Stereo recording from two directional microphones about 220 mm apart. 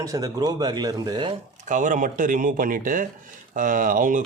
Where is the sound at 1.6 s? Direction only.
35° right (ahead or behind).